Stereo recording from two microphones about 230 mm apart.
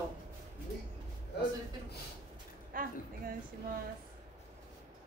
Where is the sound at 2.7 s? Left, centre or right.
Right.